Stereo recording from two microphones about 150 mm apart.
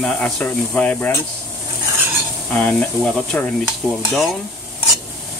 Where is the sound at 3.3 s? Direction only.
5° left (ahead or behind).